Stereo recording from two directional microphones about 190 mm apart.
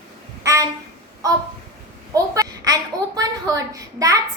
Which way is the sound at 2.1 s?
20° right (ahead or behind).